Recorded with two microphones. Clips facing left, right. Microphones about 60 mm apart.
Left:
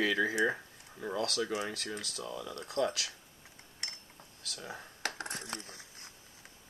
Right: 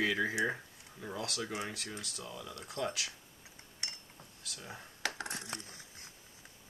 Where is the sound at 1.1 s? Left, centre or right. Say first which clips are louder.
Left 5 dB; left.